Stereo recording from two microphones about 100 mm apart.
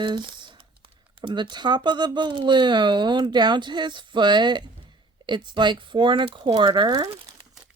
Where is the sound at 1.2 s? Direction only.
55° right (ahead or behind).